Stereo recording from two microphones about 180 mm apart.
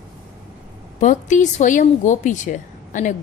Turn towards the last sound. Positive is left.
turn(degrees=45)  # may be behind; listen again after turning